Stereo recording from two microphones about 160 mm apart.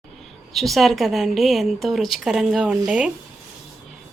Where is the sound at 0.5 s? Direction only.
Centre (ahead or behind).